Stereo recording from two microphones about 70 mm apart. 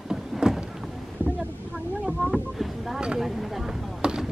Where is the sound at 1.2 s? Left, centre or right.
Right.